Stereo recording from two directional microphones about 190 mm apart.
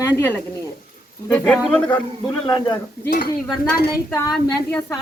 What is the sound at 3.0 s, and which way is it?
Speech, 50° left (ahead or behind).